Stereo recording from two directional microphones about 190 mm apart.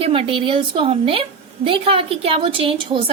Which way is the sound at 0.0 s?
30° right (ahead or behind).